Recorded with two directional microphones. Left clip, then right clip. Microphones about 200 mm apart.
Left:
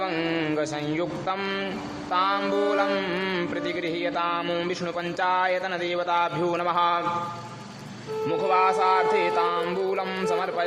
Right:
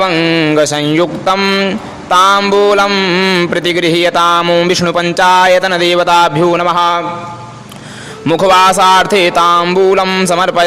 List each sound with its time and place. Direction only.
0.0 s speech: 30° right (ahead or behind)
8.3 s speech: 40° right (ahead or behind)